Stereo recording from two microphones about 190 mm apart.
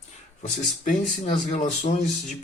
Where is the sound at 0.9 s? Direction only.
40° left (ahead or behind).